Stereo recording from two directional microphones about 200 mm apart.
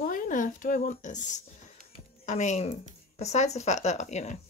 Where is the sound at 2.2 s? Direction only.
35° left (ahead or behind).